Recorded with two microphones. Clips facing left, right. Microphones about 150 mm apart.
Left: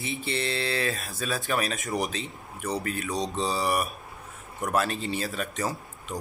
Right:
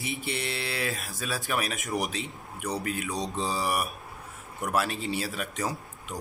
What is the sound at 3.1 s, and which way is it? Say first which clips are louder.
Mantra: left 5 dB; 20° left (ahead or behind).